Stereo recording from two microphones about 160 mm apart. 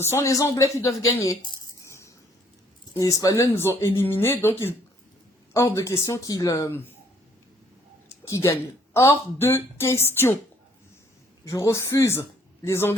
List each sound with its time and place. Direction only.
0.0 s speech: 15° left (ahead or behind)
1.5 s a sound: 20° left (ahead or behind)
2.9 s a woman's voice: 20° left (ahead or behind)
8.3 s a woman's voice: 15° left (ahead or behind)
11.4 s a woman's voice: 20° left (ahead or behind)